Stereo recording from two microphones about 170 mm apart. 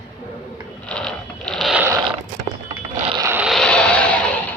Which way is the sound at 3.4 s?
Centre (ahead or behind).